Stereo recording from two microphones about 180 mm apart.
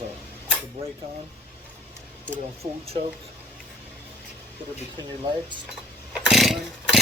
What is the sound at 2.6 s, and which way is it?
Speech, 25° right (ahead or behind).